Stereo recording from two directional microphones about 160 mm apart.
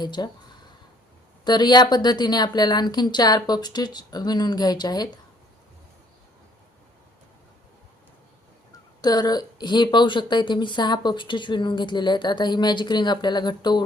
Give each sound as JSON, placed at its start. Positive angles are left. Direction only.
{"t": 0.0, "sound": "speech", "side_deg": 25}
{"t": 1.5, "sound": "speech", "side_deg": 25}
{"t": 8.7, "sound": "speech", "side_deg": 25}